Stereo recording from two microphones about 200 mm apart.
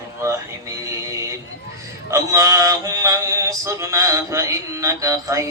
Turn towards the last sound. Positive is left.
turn(degrees=-15)  # may be behind; listen again after turning